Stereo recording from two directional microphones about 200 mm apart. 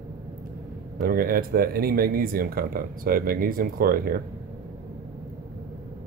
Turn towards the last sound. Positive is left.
turn(degrees=-50)  # may be behind; listen again after turning